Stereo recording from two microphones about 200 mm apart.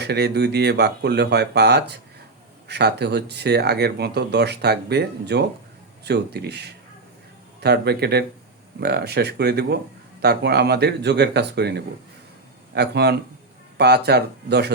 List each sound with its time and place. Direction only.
0.0 s speech: 55° right (ahead or behind)
12.7 s speech: 55° right (ahead or behind)